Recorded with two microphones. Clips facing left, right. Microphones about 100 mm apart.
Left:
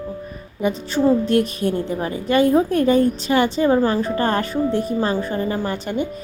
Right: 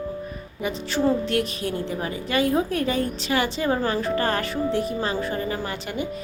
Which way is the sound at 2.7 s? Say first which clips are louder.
Left 8 dB; 45° left (ahead or behind).